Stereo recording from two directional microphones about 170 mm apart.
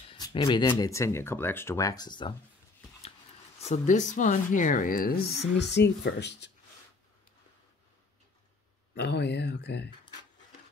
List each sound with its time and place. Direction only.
0.1 s speech: 30° left (ahead or behind)
3.5 s speech: 40° left (ahead or behind); by 6.5 s 90° left
8.9 s speech: 85° left